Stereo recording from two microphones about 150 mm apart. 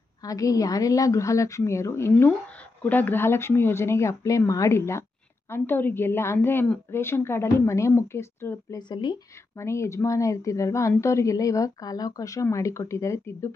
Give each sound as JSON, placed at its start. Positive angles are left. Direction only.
{"t": 0.2, "sound": "a woman's voice", "side_deg": 25}
{"t": 8.7, "sound": "speech", "side_deg": 30}
{"t": 9.6, "sound": "speech", "side_deg": 20}